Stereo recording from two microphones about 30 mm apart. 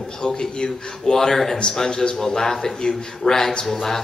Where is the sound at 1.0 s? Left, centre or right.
Centre.